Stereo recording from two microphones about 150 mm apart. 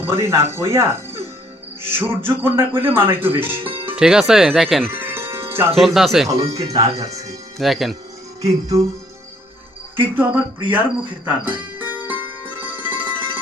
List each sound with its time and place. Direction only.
0.0 s speech: 15° right (ahead or behind)
3.7 s music: 35° right (ahead or behind)
3.9 s speech: 5° right (ahead or behind)
4.9 s music: 15° right (ahead or behind)
5.8 s speech: centre (ahead or behind)
6.2 s speech: 20° right (ahead or behind)
7.6 s speech: centre (ahead or behind)
8.4 s speech: 20° right (ahead or behind)
10.0 s speech: 15° right (ahead or behind)
11.3 s music: 10° right (ahead or behind)